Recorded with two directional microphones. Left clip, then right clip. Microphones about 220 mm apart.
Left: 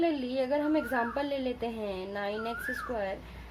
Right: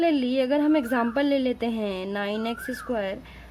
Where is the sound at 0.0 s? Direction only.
40° right (ahead or behind).